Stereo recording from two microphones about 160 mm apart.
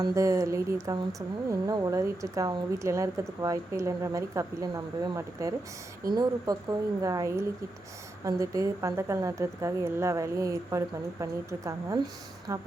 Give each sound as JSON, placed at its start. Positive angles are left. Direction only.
{"t": 0.0, "sound": "speech", "side_deg": -20}